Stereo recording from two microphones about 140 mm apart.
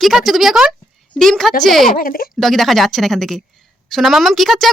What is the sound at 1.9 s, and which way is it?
Speech, 85° left.